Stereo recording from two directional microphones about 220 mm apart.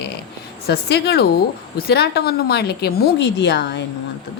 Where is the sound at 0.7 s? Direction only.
50° left (ahead or behind).